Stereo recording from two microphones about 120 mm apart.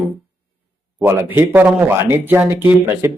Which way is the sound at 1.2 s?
15° right (ahead or behind).